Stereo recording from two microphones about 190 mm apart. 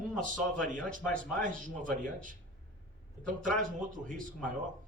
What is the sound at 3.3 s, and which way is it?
Speech, 45° right (ahead or behind).